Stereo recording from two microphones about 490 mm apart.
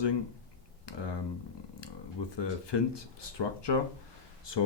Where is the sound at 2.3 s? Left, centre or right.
Left.